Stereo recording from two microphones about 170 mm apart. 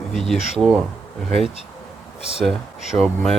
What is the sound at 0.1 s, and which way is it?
Speech, centre (ahead or behind).